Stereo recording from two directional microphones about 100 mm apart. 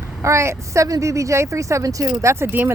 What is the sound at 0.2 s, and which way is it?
Speech, 30° right (ahead or behind).